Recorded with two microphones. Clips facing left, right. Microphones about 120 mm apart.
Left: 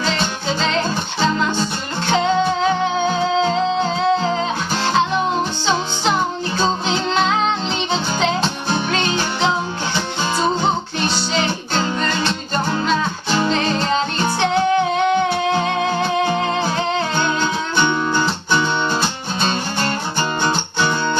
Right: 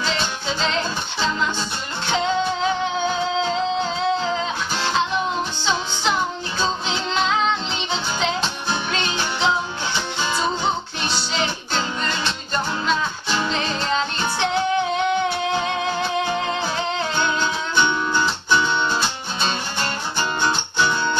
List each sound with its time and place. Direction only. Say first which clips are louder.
0.0 s music: left 4 dB; 45° left (ahead or behind)
6.6 s music: left 4 dB; 45° left (ahead or behind)